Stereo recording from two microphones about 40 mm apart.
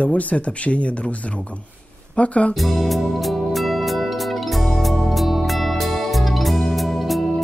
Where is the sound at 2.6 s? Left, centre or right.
Centre.